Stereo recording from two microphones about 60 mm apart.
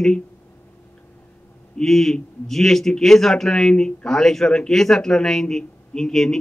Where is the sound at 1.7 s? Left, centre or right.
Centre.